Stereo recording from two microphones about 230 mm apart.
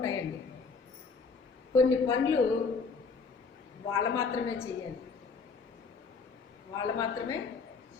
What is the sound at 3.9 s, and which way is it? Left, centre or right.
Speech, centre.